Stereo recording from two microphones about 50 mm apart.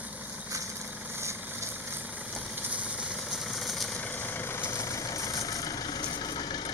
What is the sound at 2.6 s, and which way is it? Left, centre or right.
Vehicle, right.